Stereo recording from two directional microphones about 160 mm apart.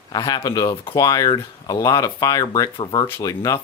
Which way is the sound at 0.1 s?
30° left (ahead or behind).